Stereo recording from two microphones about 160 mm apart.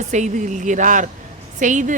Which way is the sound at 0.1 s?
50° right (ahead or behind).